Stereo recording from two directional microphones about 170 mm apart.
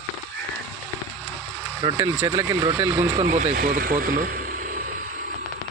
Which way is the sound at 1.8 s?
15° right (ahead or behind).